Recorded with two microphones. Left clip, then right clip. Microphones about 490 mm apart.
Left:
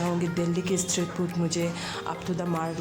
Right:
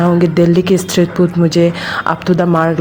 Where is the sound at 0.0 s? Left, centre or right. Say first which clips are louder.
Right 17 dB; left.